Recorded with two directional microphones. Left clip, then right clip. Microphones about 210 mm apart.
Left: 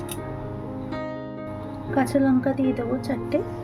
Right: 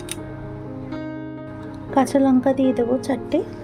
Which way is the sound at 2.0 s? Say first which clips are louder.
Right 4 dB; 35° right (ahead or behind).